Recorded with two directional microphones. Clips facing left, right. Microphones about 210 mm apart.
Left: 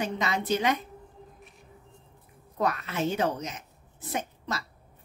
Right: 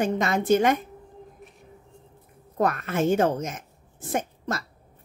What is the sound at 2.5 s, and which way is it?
Speech, 50° right (ahead or behind).